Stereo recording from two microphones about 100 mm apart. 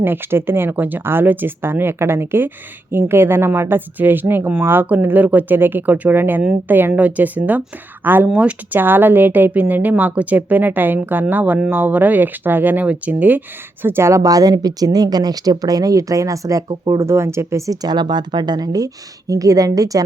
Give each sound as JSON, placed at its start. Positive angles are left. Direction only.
{"t": 0.0, "sound": "speech", "side_deg": -20}
{"t": 17.8, "sound": "speech", "side_deg": -45}